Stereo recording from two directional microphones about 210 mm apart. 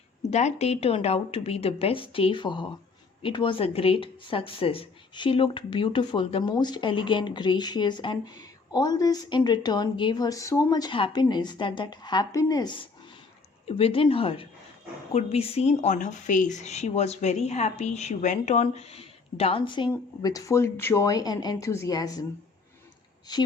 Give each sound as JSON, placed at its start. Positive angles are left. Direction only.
{"t": 0.3, "sound": "speech", "side_deg": 30}
{"t": 23.3, "sound": "speech", "side_deg": 20}